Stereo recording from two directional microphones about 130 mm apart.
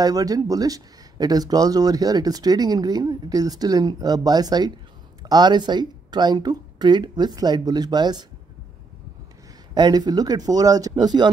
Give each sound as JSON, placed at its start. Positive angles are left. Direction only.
{"t": 0.0, "sound": "speech", "side_deg": -30}
{"t": 9.8, "sound": "speech", "side_deg": -30}